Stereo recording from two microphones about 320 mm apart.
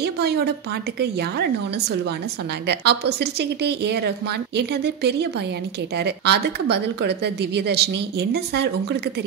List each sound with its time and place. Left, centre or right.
0.0 s a woman's voice: right
2.7 s speech: right